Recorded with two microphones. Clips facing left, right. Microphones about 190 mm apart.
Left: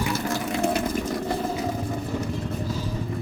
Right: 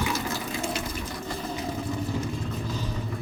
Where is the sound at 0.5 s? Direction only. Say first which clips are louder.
Left 9 dB; 65° left (ahead or behind).